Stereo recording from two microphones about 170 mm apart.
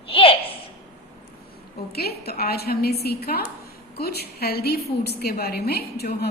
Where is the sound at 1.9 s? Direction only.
65° left (ahead or behind).